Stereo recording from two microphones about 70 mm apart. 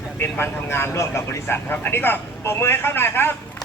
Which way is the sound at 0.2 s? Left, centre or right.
Left.